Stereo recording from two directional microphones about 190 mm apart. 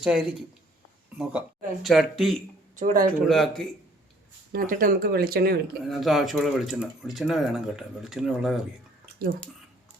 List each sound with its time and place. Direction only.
0.0 s speech: 5° right (ahead or behind)
2.7 s speech: 45° right (ahead or behind)
3.2 s speech: centre (ahead or behind)
4.5 s speech: 45° right (ahead or behind)
5.8 s speech: centre (ahead or behind)